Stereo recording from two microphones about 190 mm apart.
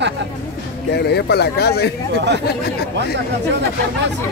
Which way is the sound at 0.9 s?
60° left (ahead or behind).